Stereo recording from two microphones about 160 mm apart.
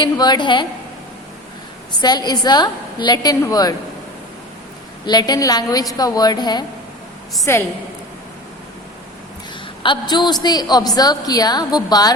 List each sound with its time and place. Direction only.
0.0 s a woman's voice: 25° left (ahead or behind)
2.0 s a woman's voice: 25° left (ahead or behind)
5.0 s a woman's voice: 25° left (ahead or behind)
9.8 s a woman's voice: 30° left (ahead or behind)